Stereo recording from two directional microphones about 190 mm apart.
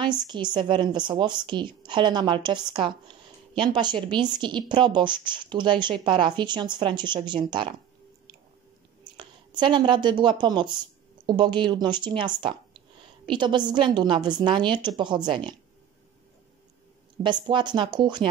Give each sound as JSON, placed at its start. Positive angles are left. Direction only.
{"t": 0.3, "sound": "a woman's voice", "side_deg": -25}
{"t": 9.1, "sound": "a woman's voice", "side_deg": -25}
{"t": 12.4, "sound": "a sound", "side_deg": -25}
{"t": 13.3, "sound": "a woman's voice", "side_deg": -25}
{"t": 17.2, "sound": "a woman's voice", "side_deg": -25}